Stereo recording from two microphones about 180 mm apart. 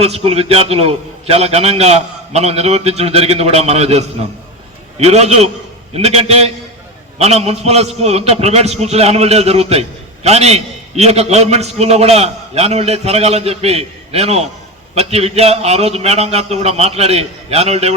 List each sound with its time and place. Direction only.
0.0 s a man's voice: 35° right (ahead or behind)